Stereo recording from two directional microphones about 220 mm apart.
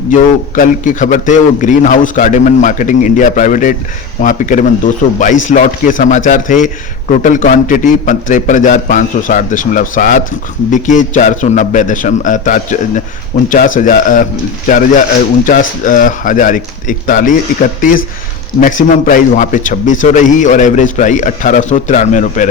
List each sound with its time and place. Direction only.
0.1 s a man's voice: 35° left (ahead or behind)